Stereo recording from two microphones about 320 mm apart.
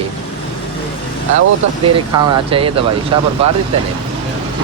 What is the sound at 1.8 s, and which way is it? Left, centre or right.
Speech, centre.